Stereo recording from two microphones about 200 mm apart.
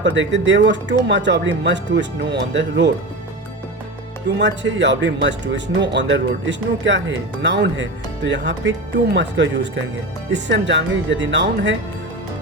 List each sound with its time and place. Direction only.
0.0 s speech: 65° right (ahead or behind)
4.4 s speech: 65° right (ahead or behind)